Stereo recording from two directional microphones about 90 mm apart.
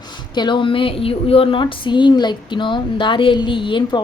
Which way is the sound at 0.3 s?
60° left (ahead or behind).